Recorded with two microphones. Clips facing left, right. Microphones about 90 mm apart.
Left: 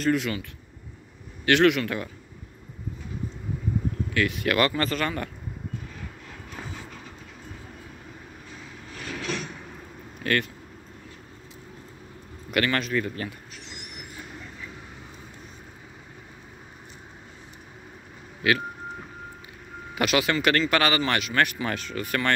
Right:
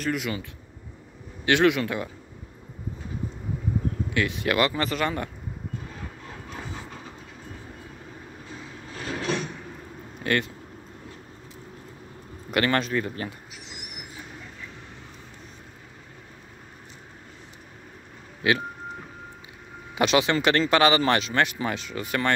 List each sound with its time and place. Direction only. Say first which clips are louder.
0.0 s speech: left 4 dB; 5° right (ahead or behind)
1.4 s speech: left 1 dB; 20° right (ahead or behind)
4.1 s speech: left 1 dB; 25° right (ahead or behind)
8.9 s vehicle: right 4 dB; 35° right (ahead or behind)
10.2 s speech: even; 20° right (ahead or behind)
12.4 s speech: right 2 dB; 30° right (ahead or behind)
13.7 s train: even; 5° right (ahead or behind)
18.4 s speech: even; 25° right (ahead or behind)
20.0 s speech: right 2 dB; 25° right (ahead or behind)
21.6 s speech: even; 20° right (ahead or behind)